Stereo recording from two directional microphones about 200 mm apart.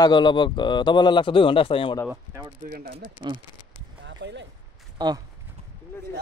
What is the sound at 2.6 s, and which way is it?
Speech, 45° right (ahead or behind).